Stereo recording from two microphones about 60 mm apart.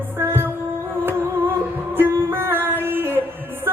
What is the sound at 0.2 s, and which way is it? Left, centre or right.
Music, right.